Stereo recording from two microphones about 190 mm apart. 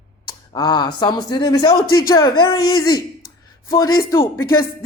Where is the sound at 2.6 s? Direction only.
90° left.